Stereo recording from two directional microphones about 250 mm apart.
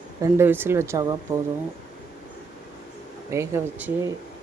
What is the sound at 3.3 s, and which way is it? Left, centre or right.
Speech, centre.